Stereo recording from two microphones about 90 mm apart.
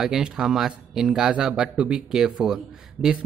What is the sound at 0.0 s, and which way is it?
Speech, 5° right (ahead or behind).